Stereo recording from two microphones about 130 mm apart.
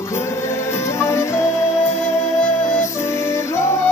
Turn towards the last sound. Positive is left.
turn(degrees=20)  # may be behind; listen again after turning